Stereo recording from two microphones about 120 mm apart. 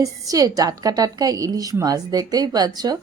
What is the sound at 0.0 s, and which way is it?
A woman's voice, 30° right (ahead or behind).